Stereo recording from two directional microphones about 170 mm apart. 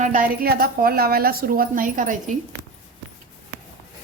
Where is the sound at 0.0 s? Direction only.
55° right (ahead or behind).